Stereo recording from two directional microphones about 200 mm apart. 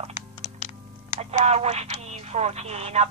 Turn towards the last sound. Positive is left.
turn(degrees=-35)  # may be behind; listen again after turning